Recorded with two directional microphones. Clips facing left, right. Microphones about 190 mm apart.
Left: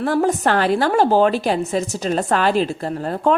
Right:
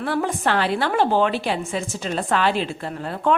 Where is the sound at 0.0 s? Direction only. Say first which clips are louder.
Left 5 dB; 40° left (ahead or behind).